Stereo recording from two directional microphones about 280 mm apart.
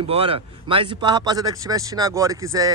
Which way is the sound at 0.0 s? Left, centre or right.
Centre.